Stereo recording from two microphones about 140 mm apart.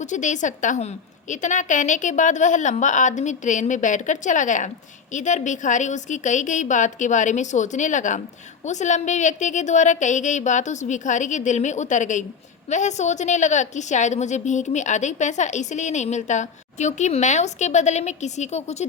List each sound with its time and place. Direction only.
0.0 s a woman's voice: 60° left (ahead or behind)